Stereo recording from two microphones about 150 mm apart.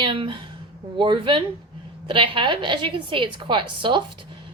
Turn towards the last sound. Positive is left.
turn(degrees=-35)  # may be behind; listen again after turning